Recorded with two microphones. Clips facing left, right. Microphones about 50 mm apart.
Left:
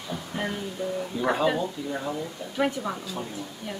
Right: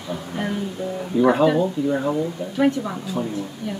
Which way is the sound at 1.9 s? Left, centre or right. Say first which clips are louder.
Right 9 dB; centre.